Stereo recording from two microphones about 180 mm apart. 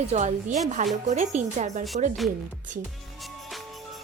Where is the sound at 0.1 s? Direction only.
45° right (ahead or behind).